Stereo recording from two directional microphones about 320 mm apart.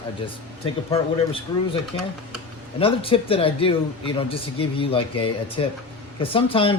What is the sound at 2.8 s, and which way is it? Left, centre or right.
A man's voice, centre.